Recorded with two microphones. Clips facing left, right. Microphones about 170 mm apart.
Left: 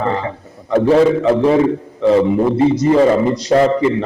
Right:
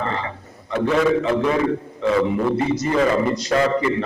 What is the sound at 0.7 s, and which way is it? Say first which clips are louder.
A man's voice: left 7 dB; 35° left (ahead or behind).